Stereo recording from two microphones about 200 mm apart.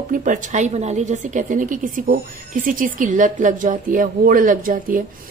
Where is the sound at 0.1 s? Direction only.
40° right (ahead or behind).